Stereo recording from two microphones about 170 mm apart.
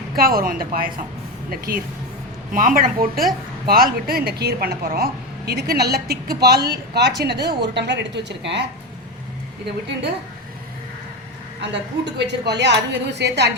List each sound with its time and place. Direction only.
0.2 s a woman's voice: 60° right (ahead or behind); by 8.6 s 90° right
11.6 s a woman's voice: 90° right